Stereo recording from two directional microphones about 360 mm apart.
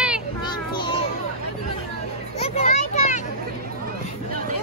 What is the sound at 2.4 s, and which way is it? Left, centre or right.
Children playing, centre.